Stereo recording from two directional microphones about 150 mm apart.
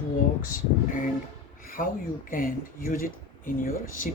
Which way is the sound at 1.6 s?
65° left (ahead or behind).